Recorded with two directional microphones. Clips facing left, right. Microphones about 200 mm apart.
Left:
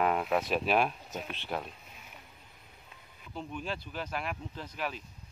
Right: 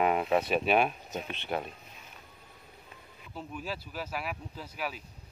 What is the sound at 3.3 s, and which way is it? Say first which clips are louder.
Speech: left 1 dB; 5° right (ahead or behind).